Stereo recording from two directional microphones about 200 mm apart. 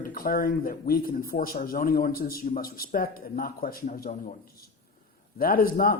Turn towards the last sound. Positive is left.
turn(degrees=45)  # may be behind; listen again after turning